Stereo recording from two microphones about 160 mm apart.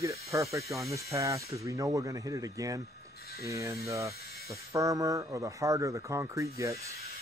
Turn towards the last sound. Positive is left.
turn(degrees=-20)  # may be behind; listen again after turning